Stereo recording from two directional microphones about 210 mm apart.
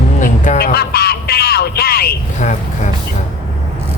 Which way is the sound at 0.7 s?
50° left (ahead or behind).